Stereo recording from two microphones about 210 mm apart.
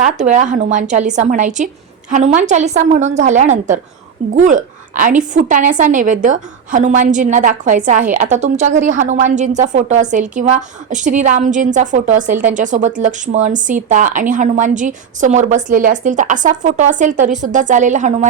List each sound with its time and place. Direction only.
0.0 s speech: 35° right (ahead or behind)